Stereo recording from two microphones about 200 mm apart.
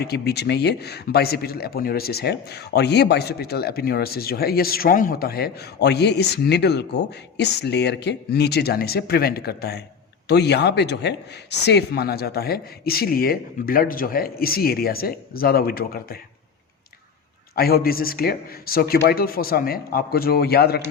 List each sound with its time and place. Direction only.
0.0 s speech: 55° left (ahead or behind)
17.5 s speech: 50° left (ahead or behind)